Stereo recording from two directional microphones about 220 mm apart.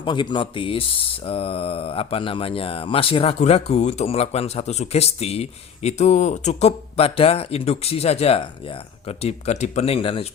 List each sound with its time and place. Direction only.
0.0 s speech: 20° left (ahead or behind)